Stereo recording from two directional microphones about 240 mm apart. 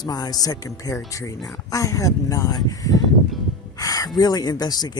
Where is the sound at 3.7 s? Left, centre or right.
Centre.